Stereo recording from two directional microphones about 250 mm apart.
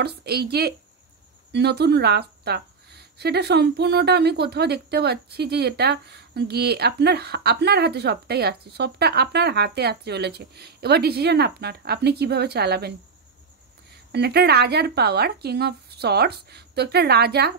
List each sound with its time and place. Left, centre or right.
0.0 s a woman's voice: right
14.1 s a woman's voice: right